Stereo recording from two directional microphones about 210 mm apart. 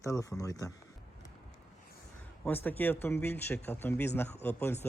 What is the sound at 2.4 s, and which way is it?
A man's voice, 10° left (ahead or behind).